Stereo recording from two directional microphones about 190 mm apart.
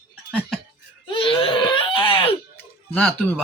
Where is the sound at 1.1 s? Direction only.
30° left (ahead or behind).